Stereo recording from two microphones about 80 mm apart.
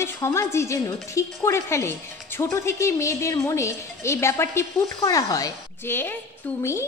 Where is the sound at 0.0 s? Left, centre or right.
Left.